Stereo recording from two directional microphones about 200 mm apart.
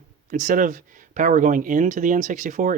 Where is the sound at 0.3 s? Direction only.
40° right (ahead or behind).